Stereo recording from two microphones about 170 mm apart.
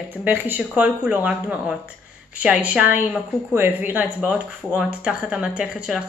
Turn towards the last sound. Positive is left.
turn(degrees=-5)  # may be behind; listen again after turning